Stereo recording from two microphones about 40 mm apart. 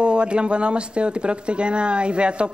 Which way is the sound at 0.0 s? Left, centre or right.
Right.